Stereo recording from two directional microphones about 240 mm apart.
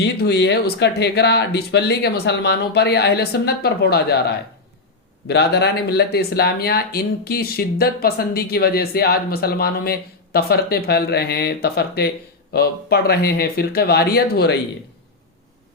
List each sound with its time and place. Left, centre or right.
0.0 s speech: left